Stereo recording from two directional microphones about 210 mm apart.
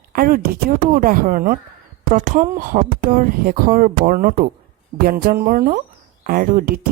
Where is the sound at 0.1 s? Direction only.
45° right (ahead or behind).